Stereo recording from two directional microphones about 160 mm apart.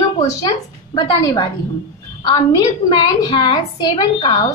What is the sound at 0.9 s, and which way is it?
Speech, 30° left (ahead or behind).